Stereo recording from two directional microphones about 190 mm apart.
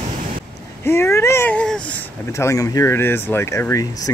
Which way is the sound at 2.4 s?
15° left (ahead or behind).